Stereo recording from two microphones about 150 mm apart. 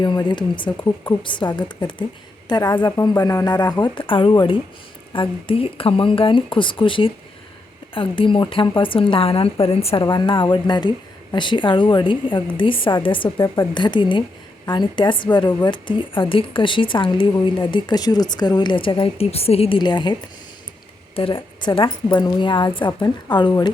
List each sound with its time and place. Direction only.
0.0 s a woman's voice: 30° left (ahead or behind)
21.2 s a woman's voice: 35° left (ahead or behind)